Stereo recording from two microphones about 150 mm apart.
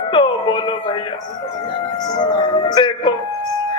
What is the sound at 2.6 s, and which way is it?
Speech, 30° left (ahead or behind).